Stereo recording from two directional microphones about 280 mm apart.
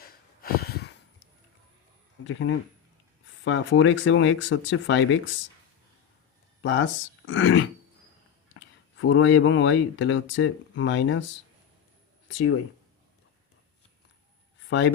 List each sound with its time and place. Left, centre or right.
0.0 s a sound: left
2.2 s speech: left
6.6 s speech: left
14.7 s speech: left